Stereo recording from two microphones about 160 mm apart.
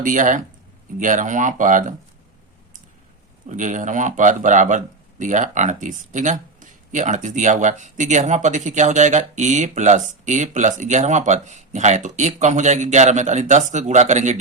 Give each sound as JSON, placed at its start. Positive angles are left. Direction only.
{"t": 0.0, "sound": "speech", "side_deg": -55}
{"t": 3.5, "sound": "speech", "side_deg": -50}